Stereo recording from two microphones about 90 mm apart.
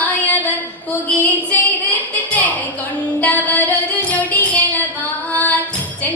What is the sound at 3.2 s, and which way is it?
Music, 15° left (ahead or behind).